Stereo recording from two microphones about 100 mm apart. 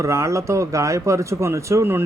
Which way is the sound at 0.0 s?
30° right (ahead or behind).